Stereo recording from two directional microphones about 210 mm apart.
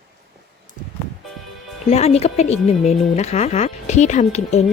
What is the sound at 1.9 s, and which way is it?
A woman's voice, 30° left (ahead or behind).